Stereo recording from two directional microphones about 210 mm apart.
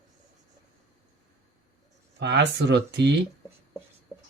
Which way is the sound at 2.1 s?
55° right (ahead or behind).